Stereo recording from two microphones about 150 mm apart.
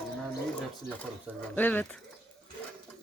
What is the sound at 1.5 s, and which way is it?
Speech, 10° left (ahead or behind).